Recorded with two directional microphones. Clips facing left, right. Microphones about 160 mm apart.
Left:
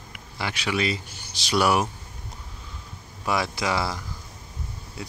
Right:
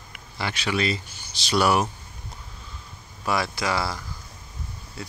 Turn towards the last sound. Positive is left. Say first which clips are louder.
# even
turn(degrees=15)  # may be behind; listen again after turning